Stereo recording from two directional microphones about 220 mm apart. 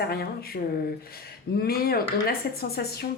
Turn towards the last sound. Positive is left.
turn(degrees=45)  # may be behind; listen again after turning